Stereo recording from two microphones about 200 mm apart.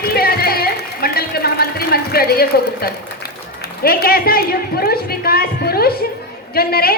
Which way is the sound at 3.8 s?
50° left (ahead or behind).